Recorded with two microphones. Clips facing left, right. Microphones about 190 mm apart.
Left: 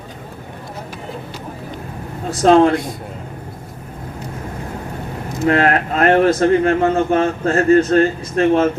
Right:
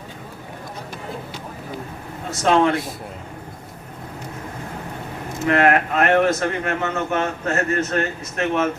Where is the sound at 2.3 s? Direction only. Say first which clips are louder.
Left 6 dB; 35° left (ahead or behind).